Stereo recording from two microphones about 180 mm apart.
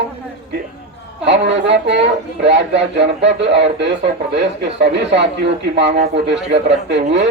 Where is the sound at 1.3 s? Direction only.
75° right (ahead or behind).